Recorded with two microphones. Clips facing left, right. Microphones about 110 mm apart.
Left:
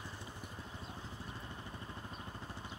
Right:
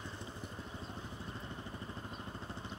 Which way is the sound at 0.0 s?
25° right (ahead or behind).